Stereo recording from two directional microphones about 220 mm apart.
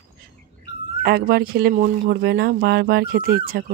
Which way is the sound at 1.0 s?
45° right (ahead or behind).